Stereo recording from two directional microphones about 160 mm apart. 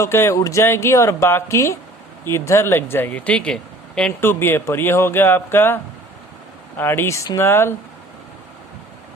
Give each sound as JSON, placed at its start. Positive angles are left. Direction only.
{"t": 0.0, "sound": "speech", "side_deg": 15}